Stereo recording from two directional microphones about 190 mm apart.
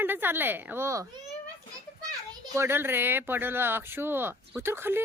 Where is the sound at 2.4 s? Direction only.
15° right (ahead or behind).